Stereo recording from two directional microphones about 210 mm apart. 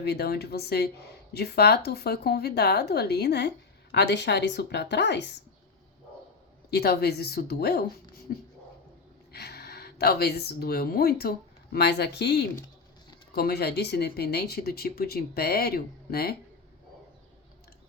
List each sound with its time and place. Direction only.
0.0 s a woman's voice: 50° left (ahead or behind)
6.7 s speech: 50° left (ahead or behind)